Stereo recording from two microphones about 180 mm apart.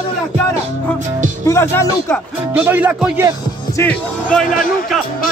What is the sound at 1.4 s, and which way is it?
Speech, 15° left (ahead or behind).